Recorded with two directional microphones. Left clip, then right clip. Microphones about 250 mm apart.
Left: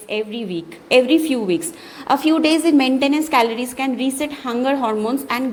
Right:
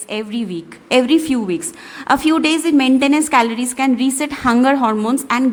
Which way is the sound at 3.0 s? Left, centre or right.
Right.